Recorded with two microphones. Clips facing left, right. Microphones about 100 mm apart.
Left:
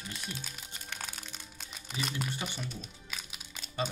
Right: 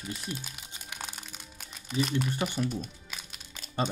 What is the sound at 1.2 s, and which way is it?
Music, 5° right (ahead or behind).